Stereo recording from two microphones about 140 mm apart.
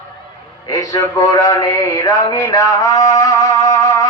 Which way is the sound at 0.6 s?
25° left (ahead or behind).